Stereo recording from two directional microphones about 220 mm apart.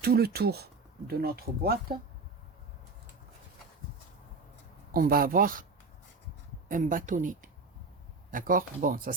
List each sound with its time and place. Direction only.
0.0 s speech: 45° right (ahead or behind)
4.9 s speech: 40° right (ahead or behind)
6.7 s speech: 40° right (ahead or behind)